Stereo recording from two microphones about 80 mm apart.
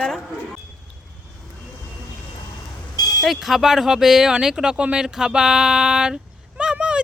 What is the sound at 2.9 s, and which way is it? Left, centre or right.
Vehicle, left.